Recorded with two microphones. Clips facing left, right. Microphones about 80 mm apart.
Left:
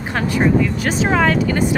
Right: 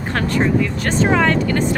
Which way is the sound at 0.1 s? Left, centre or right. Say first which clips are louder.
Left 1 dB; centre.